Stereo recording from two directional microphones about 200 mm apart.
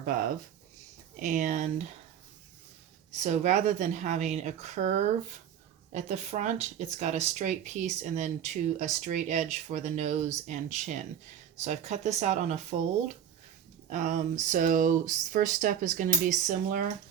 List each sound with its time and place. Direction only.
0.0 s speech: 45° right (ahead or behind)
3.2 s speech: 35° right (ahead or behind)
13.9 s speech: 40° right (ahead or behind)